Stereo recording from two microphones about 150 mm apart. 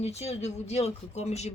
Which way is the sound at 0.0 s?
45° left (ahead or behind).